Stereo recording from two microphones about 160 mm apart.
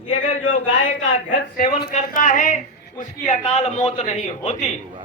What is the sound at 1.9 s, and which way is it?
A woman's voice, 55° left (ahead or behind).